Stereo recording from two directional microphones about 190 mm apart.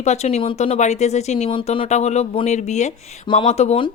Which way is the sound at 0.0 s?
35° left (ahead or behind).